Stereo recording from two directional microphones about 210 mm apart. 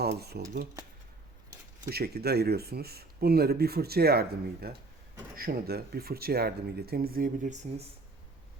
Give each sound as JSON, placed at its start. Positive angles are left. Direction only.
{"t": 0.0, "sound": "speech", "side_deg": -50}
{"t": 1.8, "sound": "speech", "side_deg": -50}